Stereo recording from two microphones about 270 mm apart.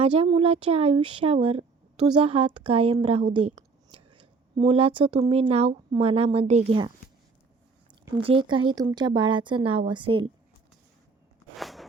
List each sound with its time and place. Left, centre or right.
0.0 s speech: right
8.0 s speech: centre
11.5 s a sound: centre